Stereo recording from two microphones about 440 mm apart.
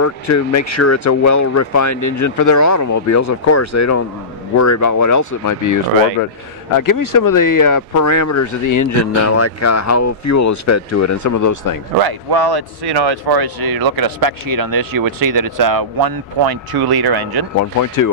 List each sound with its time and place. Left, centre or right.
0.0 s speech: left
12.0 s speech: right
17.6 s speech: left